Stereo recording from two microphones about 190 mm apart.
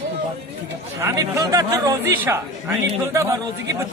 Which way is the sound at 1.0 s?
15° right (ahead or behind).